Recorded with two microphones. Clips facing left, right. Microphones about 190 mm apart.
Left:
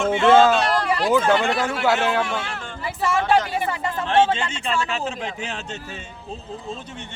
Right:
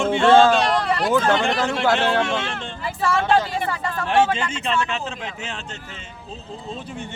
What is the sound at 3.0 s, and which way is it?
A man's voice, 20° left (ahead or behind).